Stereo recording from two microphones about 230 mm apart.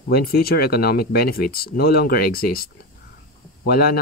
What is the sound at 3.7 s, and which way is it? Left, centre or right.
Speech, left.